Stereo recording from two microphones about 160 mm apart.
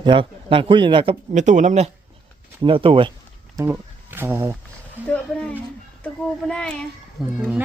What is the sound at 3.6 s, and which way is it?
Speech, 15° right (ahead or behind).